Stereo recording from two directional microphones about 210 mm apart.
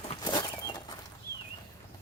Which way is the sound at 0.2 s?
20° left (ahead or behind).